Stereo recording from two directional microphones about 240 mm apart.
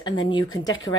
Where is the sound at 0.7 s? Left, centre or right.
Left.